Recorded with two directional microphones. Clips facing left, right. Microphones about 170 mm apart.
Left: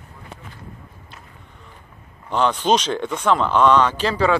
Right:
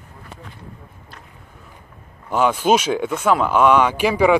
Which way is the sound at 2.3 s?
10° right (ahead or behind).